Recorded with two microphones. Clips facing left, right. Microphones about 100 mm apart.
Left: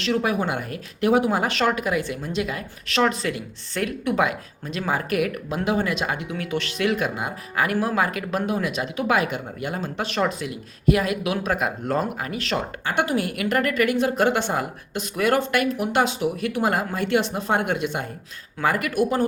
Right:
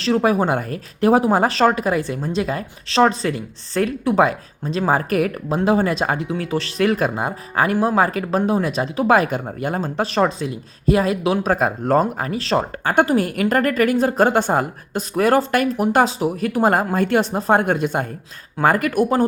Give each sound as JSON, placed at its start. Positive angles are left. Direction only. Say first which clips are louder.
{"t": 0.0, "sound": "speech", "louder": "right 5 dB", "side_deg": -35}